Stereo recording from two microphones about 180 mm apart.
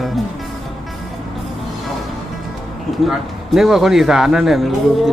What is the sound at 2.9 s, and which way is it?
A man's voice, centre (ahead or behind).